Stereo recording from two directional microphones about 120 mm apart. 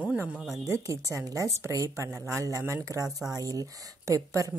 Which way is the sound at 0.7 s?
25° right (ahead or behind).